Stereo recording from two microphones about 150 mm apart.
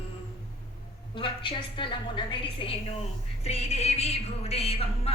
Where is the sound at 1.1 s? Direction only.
35° left (ahead or behind).